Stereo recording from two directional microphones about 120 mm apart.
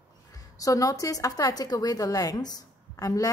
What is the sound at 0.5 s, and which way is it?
A woman's voice, 30° left (ahead or behind).